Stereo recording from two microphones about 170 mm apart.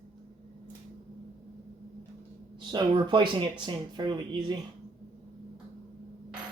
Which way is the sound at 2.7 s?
30° right (ahead or behind).